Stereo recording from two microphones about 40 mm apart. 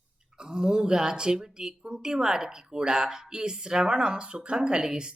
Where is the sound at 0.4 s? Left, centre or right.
Centre.